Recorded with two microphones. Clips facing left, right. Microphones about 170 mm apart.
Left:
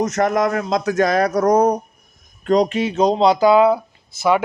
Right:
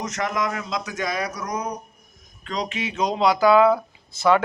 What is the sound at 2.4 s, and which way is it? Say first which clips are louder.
Speech: left 12 dB; 45° left (ahead or behind).